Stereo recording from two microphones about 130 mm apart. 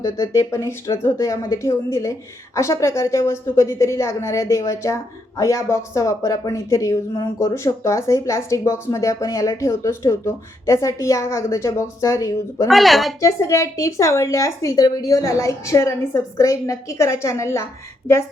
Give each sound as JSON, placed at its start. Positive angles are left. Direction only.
{"t": 0.0, "sound": "speech", "side_deg": 25}
{"t": 12.6, "sound": "a woman's voice", "side_deg": 0}
{"t": 13.2, "sound": "speech", "side_deg": 25}